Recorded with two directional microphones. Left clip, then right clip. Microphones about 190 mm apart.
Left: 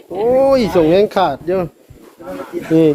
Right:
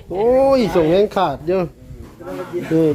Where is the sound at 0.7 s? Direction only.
30° left (ahead or behind).